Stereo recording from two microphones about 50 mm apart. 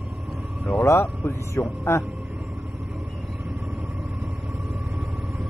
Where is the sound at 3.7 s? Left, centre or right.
Right.